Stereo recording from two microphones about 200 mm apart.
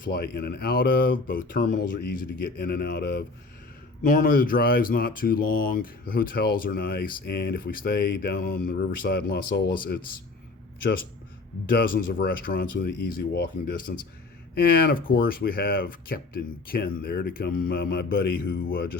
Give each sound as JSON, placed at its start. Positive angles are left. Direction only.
{"t": 0.0, "sound": "speech", "side_deg": 50}
{"t": 11.7, "sound": "speech", "side_deg": 45}